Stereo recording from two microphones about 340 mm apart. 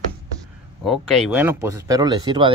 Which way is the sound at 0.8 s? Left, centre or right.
Centre.